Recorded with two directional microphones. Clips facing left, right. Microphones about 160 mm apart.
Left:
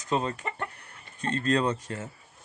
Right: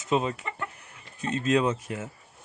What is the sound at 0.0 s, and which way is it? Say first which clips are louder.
Speech: right 2 dB; 5° right (ahead or behind).